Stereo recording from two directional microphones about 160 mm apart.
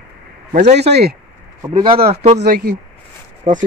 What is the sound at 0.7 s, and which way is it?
Speech, 90° right.